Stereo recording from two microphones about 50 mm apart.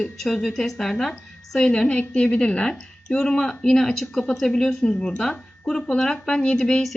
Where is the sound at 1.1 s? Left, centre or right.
Centre.